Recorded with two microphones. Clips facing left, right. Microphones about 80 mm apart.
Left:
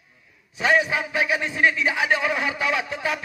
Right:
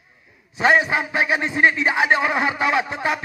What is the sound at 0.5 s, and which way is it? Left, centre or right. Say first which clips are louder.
A man's voice: right 3 dB; right.